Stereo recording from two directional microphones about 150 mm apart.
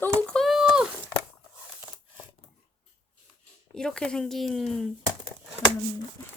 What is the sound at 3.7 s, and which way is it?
Speech, 5° left (ahead or behind).